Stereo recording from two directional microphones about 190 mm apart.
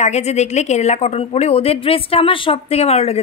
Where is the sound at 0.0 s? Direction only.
35° left (ahead or behind).